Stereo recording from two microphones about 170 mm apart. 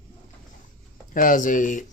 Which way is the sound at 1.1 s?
55° left (ahead or behind).